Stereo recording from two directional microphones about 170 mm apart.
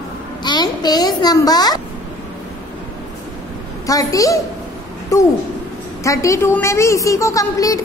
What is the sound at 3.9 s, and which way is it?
Speech, 20° left (ahead or behind).